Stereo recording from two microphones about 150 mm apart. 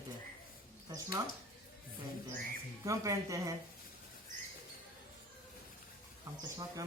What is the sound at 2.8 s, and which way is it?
Speech, 20° right (ahead or behind).